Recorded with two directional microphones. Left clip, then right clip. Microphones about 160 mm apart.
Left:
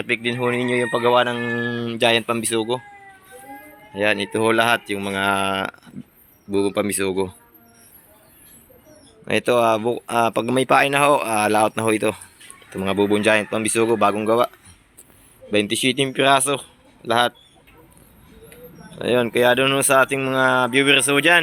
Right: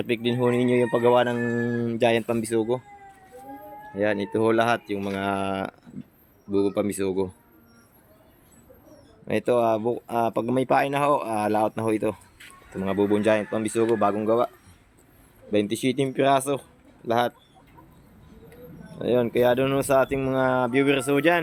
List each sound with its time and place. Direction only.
0.0 s speech: 35° right (ahead or behind); by 2.8 s 15° right (ahead or behind)
3.9 s speech: 10° right (ahead or behind)
9.2 s speech: centre (ahead or behind)
18.9 s speech: 5° right (ahead or behind)